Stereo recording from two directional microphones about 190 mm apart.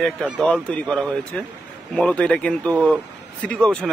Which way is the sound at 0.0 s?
5° left (ahead or behind).